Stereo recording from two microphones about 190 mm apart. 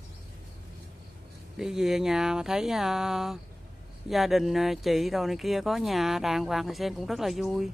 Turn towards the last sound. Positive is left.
turn(degrees=0)  # may be behind; listen again after turning